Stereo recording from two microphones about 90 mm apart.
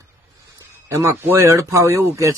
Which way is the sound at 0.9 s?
35° right (ahead or behind).